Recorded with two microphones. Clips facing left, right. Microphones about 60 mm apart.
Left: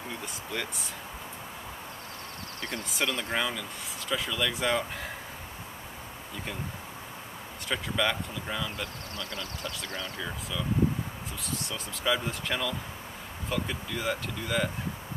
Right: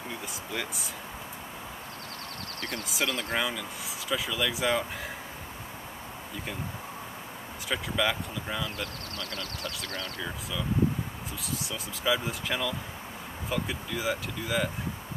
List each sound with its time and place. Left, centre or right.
0.1 s speech: centre
2.9 s speech: centre
7.6 s speech: centre
9.1 s speech: centre
11.4 s speech: centre